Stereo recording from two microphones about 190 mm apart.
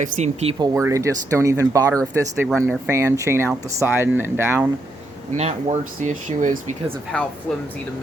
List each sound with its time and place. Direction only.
0.0 s speech: 35° right (ahead or behind)
0.6 s speech: 15° right (ahead or behind)
2.5 s speech: centre (ahead or behind)
2.8 s speech: 15° right (ahead or behind)
5.4 s speech: 35° right (ahead or behind)
7.1 s speech: 5° left (ahead or behind)